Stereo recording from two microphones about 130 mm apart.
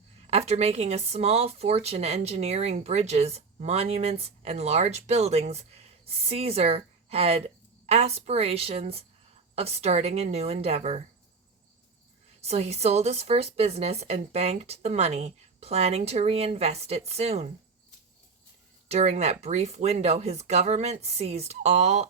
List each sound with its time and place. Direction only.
0.3 s speech: 55° right (ahead or behind)
12.4 s speech: 55° right (ahead or behind)
18.9 s speech: 55° right (ahead or behind)